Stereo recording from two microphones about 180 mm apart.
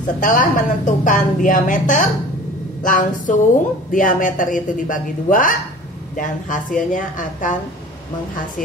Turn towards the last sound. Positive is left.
turn(degrees=45)  # may be behind; listen again after turning